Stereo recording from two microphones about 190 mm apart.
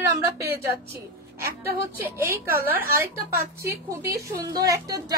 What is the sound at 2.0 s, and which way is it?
Speech, 10° right (ahead or behind).